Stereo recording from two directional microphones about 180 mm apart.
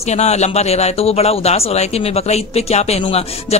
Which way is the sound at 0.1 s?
40° left (ahead or behind).